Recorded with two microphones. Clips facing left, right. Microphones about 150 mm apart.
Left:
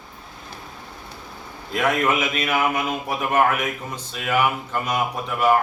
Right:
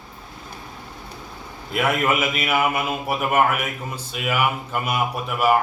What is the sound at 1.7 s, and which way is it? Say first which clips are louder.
A man's voice: even; 10° right (ahead or behind).